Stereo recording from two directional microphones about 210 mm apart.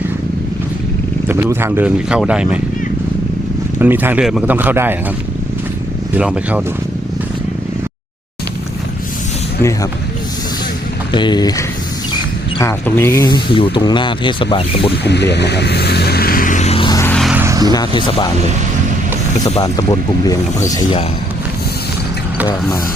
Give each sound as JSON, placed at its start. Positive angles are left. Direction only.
{"t": 1.3, "sound": "speech", "side_deg": -10}
{"t": 3.8, "sound": "speech", "side_deg": -10}
{"t": 6.1, "sound": "speech", "side_deg": -5}
{"t": 11.1, "sound": "speech", "side_deg": 20}
{"t": 15.0, "sound": "music", "side_deg": 55}
{"t": 17.0, "sound": "vehicle", "side_deg": 5}
{"t": 17.4, "sound": "vehicle", "side_deg": -15}
{"t": 17.7, "sound": "speech", "side_deg": 20}
{"t": 19.6, "sound": "speech", "side_deg": 20}